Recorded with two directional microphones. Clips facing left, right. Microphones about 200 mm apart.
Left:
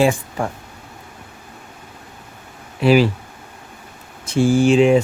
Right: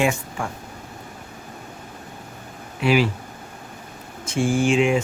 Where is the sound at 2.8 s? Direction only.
35° left (ahead or behind).